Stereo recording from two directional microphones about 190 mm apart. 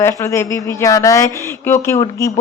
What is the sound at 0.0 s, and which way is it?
Speech, 15° left (ahead or behind).